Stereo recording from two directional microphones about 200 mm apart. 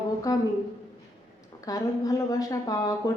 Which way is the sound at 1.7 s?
15° left (ahead or behind).